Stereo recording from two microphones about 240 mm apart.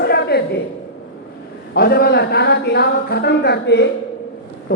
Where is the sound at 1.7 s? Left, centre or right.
Left.